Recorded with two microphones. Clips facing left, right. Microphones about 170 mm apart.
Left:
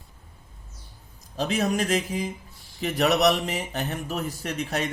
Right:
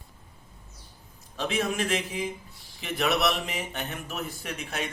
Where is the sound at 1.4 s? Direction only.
40° left (ahead or behind).